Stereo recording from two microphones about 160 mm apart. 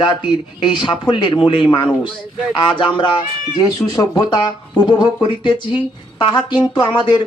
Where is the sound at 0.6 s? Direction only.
30° left (ahead or behind).